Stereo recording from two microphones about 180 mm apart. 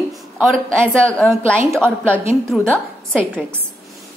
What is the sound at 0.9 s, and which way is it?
A woman's voice, 5° left (ahead or behind).